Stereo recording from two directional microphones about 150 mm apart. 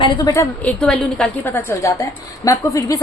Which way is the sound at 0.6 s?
10° left (ahead or behind).